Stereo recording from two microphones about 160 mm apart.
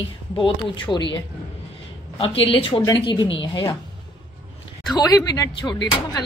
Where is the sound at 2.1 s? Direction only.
35° left (ahead or behind).